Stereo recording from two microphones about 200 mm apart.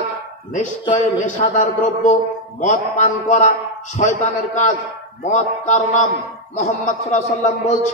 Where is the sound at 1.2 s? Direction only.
40° left (ahead or behind).